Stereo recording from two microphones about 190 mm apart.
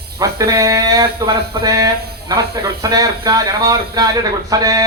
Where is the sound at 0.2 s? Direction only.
20° right (ahead or behind).